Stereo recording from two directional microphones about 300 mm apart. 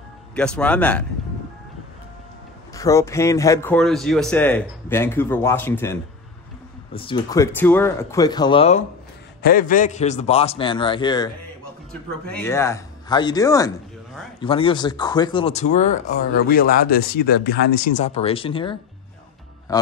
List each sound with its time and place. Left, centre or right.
0.4 s speech: centre
2.7 s speech: centre
12.3 s speech: centre
19.7 s music: centre